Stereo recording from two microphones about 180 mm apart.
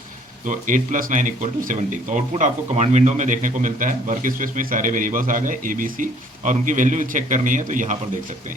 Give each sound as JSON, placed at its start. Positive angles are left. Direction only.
{"t": 0.4, "sound": "speech", "side_deg": -45}